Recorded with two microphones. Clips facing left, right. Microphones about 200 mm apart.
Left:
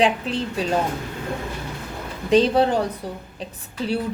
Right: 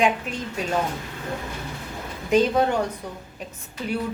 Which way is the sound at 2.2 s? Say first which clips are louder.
Left 3 dB; 30° left (ahead or behind).